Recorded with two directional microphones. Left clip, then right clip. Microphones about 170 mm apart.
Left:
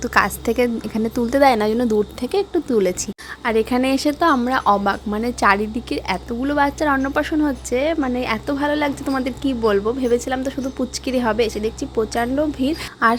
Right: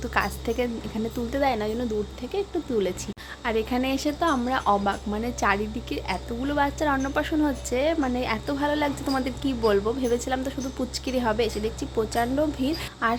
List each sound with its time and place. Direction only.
0.0 s a woman's voice: 30° left (ahead or behind)
13.0 s a woman's voice: 40° left (ahead or behind)